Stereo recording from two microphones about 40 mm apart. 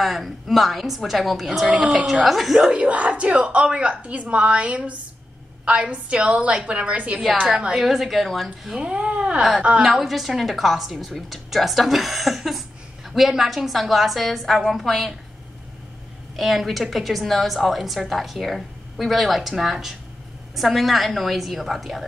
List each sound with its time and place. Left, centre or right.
0.0 s a woman's voice: centre
2.7 s speech: right
4.0 s a woman's voice: right
7.4 s a woman's voice: centre
8.7 s speech: right
9.8 s a woman's voice: centre
16.3 s a woman's voice: centre